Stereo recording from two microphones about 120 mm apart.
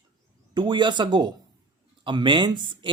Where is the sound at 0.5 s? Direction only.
40° right (ahead or behind).